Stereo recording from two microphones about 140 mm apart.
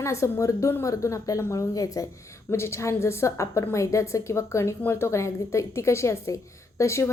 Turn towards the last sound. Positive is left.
turn(degrees=20)  # may be behind; listen again after turning